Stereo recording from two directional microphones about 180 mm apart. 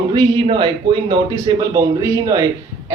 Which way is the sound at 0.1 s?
25° right (ahead or behind).